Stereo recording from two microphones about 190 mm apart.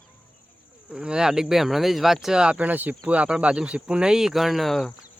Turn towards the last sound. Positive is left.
turn(degrees=0)  # may be behind; listen again after turning